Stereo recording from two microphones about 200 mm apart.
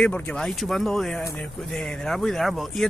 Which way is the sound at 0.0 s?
5° left (ahead or behind).